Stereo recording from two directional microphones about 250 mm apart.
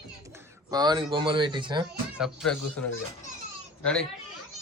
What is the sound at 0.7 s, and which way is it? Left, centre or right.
Speech, centre.